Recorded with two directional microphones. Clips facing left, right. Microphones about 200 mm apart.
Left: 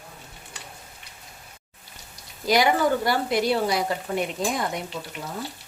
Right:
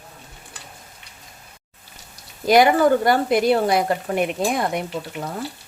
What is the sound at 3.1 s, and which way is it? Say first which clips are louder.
Speech: right 6 dB; 55° right (ahead or behind).